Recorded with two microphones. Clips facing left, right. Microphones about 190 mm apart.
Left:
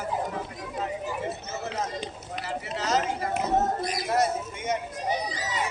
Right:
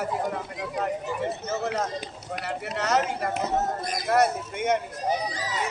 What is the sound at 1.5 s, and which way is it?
Run, 65° right (ahead or behind).